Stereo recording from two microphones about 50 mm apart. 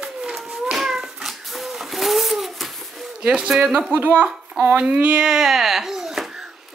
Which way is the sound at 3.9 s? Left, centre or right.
Right.